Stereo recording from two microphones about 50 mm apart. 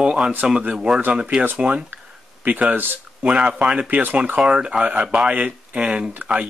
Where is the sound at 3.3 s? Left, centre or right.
Right.